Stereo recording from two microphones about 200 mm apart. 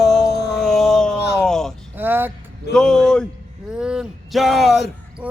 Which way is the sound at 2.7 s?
5° left (ahead or behind).